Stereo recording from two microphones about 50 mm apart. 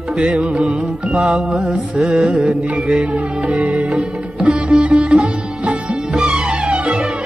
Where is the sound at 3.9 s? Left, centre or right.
Centre.